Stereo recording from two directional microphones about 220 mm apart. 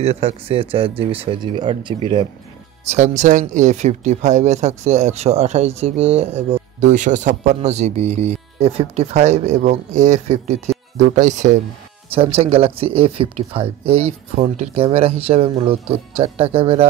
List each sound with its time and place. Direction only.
0.0 s speech: 30° right (ahead or behind)
2.9 s speech: 30° right (ahead or behind)